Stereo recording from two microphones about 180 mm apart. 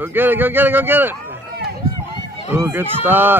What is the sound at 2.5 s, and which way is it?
Speech, 10° right (ahead or behind).